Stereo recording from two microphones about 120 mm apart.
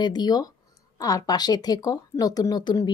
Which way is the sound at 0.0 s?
35° left (ahead or behind).